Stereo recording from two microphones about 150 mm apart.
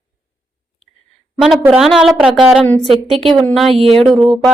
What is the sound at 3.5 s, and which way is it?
A woman's voice, centre (ahead or behind).